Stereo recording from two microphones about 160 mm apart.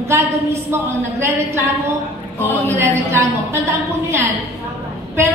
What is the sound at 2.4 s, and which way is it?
Music, 10° left (ahead or behind).